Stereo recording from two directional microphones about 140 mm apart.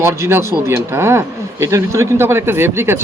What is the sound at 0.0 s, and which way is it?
Speech, 20° right (ahead or behind).